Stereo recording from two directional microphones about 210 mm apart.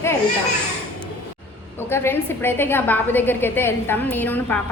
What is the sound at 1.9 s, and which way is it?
A woman's voice, 10° left (ahead or behind).